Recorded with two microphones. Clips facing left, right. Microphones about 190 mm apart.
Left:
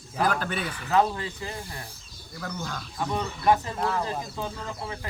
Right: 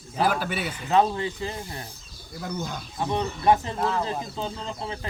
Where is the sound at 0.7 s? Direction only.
25° right (ahead or behind).